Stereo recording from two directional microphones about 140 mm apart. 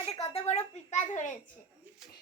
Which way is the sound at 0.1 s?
50° left (ahead or behind).